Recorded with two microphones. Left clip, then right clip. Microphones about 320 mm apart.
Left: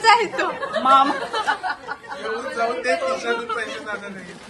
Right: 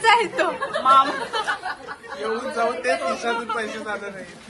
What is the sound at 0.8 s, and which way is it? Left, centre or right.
Speech, left.